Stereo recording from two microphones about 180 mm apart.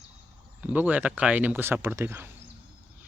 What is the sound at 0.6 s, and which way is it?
Speech, 10° right (ahead or behind).